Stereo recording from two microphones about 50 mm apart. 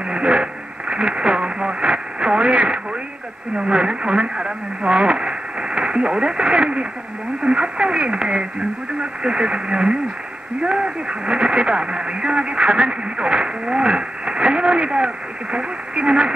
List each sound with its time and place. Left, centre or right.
0.1 s radio: centre
3.5 s speech: centre